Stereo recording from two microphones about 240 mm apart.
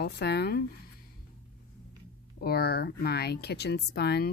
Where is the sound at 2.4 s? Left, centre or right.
Left.